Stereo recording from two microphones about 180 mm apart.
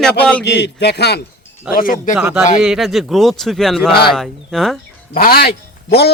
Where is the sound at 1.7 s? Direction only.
5° right (ahead or behind).